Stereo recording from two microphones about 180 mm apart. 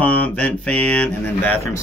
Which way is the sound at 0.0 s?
10° left (ahead or behind).